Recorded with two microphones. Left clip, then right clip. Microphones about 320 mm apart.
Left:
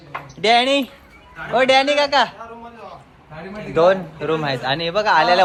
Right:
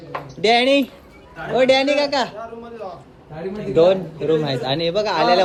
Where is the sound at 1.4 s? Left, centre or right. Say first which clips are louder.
Left 1 dB; centre.